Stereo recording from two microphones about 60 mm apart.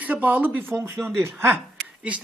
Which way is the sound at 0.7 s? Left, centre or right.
Right.